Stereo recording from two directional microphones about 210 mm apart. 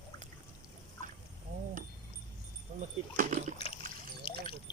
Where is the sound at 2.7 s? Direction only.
35° right (ahead or behind).